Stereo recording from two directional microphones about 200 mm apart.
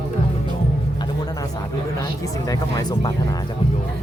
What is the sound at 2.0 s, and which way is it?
Speech, 15° left (ahead or behind).